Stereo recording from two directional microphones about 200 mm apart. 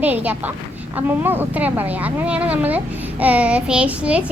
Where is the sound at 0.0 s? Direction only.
10° right (ahead or behind).